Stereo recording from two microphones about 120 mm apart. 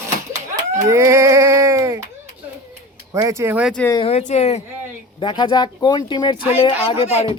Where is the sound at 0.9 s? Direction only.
25° right (ahead or behind).